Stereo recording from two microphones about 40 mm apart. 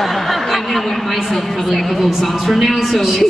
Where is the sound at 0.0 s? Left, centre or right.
Centre.